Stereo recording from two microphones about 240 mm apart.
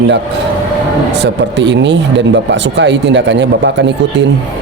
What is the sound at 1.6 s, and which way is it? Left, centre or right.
Speech, right.